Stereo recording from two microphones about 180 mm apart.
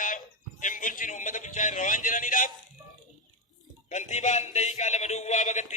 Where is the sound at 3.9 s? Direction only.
40° left (ahead or behind).